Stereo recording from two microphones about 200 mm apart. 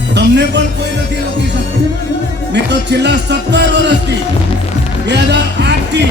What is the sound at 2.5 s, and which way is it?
Speech, 60° right (ahead or behind).